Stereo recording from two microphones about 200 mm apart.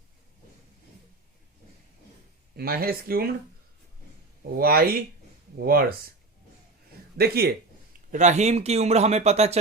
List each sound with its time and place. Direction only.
2.6 s speech: 50° right (ahead or behind)
4.5 s speech: 50° right (ahead or behind)
7.2 s speech: 50° right (ahead or behind)
8.1 s speech: 35° right (ahead or behind)